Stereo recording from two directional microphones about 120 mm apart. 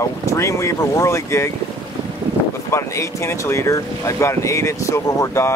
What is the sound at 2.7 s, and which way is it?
Speech, 25° left (ahead or behind).